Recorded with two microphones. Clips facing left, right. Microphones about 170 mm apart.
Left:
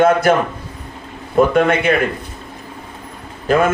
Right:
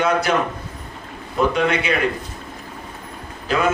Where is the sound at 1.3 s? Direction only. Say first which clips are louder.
Left 6 dB; 50° left (ahead or behind).